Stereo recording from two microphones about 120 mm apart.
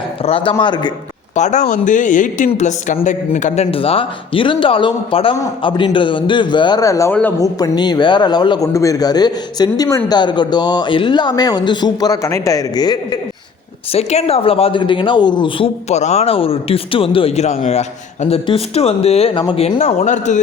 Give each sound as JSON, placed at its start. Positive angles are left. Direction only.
{"t": 0.2, "sound": "speech", "side_deg": 50}
{"t": 0.6, "sound": "a man's voice", "side_deg": 40}
{"t": 1.4, "sound": "speech", "side_deg": 80}
{"t": 2.5, "sound": "a man's voice", "side_deg": 80}
{"t": 7.1, "sound": "speech", "side_deg": 15}
{"t": 7.4, "sound": "a man's voice", "side_deg": 35}
{"t": 13.9, "sound": "speech", "side_deg": 60}
{"t": 15.9, "sound": "a man's voice", "side_deg": 65}